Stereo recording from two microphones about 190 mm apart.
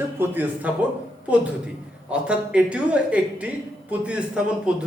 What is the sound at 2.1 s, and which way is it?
A man's voice, 5° right (ahead or behind).